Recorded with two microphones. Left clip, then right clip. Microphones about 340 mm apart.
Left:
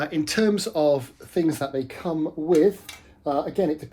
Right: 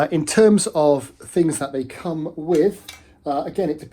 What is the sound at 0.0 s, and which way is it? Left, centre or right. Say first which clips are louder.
Speech: right 8 dB; centre.